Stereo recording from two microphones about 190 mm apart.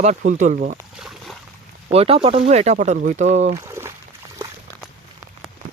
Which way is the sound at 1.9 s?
30° right (ahead or behind).